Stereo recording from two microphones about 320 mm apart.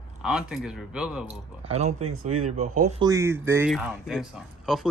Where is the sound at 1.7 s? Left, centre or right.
Right.